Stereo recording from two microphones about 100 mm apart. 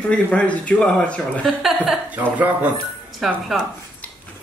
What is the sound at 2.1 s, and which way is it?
Speech, 15° right (ahead or behind).